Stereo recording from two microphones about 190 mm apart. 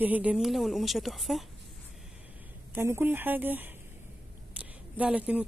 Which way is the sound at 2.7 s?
10° right (ahead or behind).